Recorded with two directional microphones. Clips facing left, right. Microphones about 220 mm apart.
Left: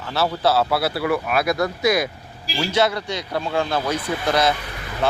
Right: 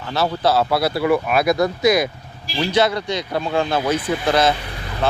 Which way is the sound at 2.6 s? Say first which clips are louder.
Right 2 dB; centre (ahead or behind).